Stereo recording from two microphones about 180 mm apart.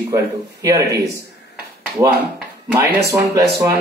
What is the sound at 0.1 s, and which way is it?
Speech, 20° right (ahead or behind).